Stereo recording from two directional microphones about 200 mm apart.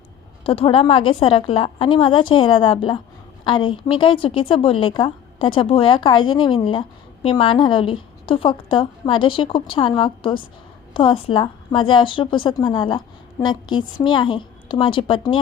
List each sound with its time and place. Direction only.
0.4 s a woman's voice: 25° left (ahead or behind)